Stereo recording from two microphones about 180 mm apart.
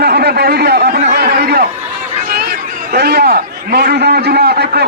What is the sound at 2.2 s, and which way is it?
Chatter, 60° right (ahead or behind).